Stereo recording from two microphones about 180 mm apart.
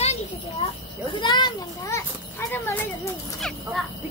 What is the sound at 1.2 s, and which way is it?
Children playing, 25° left (ahead or behind).